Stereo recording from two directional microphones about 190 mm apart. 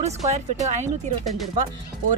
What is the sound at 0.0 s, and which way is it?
Speech, 35° right (ahead or behind).